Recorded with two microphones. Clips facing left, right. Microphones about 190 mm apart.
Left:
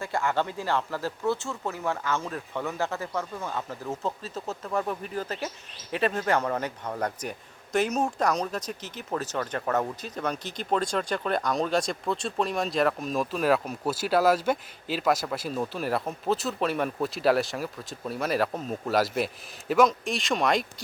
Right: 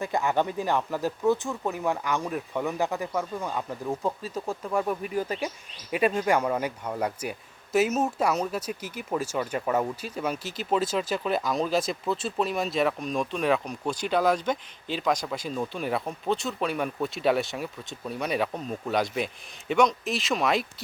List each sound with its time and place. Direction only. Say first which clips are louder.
0.0 s a man's voice: right 2 dB; 20° right (ahead or behind); by 20.8 s centre (ahead or behind)